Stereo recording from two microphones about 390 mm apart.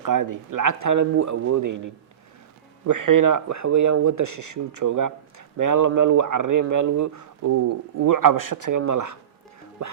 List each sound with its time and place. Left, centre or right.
0.0 s speech: right